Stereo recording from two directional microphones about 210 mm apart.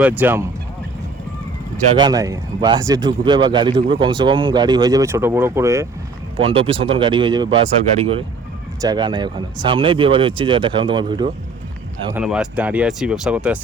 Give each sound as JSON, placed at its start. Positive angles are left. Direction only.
{"t": 0.0, "sound": "speech", "side_deg": -10}
{"t": 2.0, "sound": "speech", "side_deg": -20}
{"t": 6.3, "sound": "speech", "side_deg": -25}
{"t": 12.1, "sound": "speech", "side_deg": -5}